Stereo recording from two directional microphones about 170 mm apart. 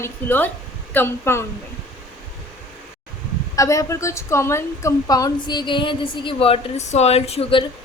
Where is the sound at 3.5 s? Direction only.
20° left (ahead or behind).